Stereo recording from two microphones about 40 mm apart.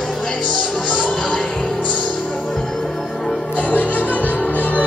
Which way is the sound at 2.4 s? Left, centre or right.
Centre.